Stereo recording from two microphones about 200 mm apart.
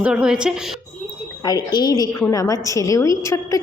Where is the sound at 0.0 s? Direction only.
5° right (ahead or behind).